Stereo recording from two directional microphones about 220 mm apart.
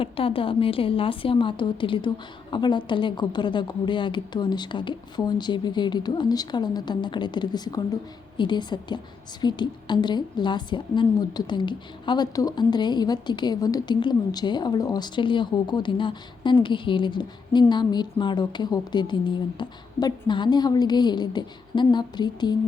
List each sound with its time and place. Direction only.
0.0 s a woman's voice: 25° left (ahead or behind)